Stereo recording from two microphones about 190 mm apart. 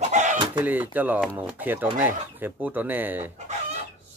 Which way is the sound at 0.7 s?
10° right (ahead or behind).